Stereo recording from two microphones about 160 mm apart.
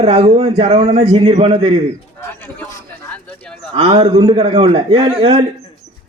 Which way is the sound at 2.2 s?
15° left (ahead or behind).